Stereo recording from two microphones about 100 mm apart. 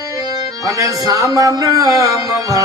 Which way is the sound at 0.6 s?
35° right (ahead or behind).